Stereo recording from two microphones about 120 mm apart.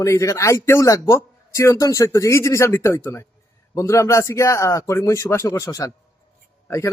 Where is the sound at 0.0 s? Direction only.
25° left (ahead or behind).